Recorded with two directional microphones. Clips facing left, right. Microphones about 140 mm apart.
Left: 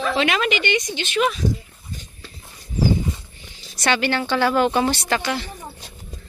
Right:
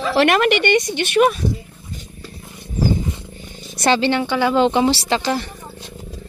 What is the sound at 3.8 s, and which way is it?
Speech, 25° right (ahead or behind).